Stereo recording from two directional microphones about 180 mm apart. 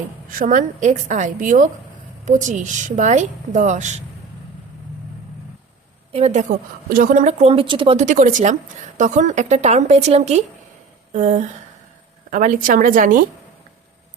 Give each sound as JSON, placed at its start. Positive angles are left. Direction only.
{"t": 0.3, "sound": "a woman's voice", "side_deg": -50}
{"t": 6.1, "sound": "a woman's voice", "side_deg": -35}
{"t": 7.9, "sound": "a woman's voice", "side_deg": -40}